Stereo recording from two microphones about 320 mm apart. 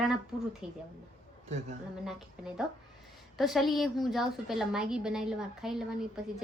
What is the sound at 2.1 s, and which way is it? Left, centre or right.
A woman's voice, centre.